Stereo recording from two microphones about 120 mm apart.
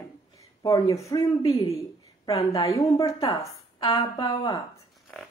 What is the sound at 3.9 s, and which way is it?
Speech, 40° left (ahead or behind).